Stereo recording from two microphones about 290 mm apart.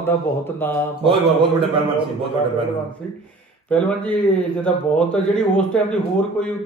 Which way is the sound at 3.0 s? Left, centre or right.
Centre.